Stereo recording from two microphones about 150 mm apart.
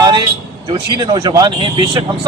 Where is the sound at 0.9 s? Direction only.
35° right (ahead or behind).